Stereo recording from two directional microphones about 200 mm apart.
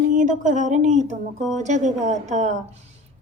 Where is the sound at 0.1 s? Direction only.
40° right (ahead or behind).